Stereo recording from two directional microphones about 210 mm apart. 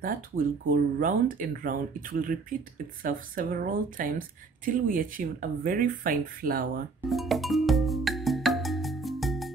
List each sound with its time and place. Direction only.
0.0 s speech: 40° right (ahead or behind)
7.1 s music: centre (ahead or behind)